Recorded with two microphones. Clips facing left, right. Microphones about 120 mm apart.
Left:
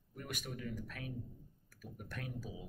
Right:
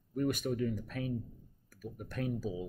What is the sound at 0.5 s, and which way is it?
Speech, 35° right (ahead or behind).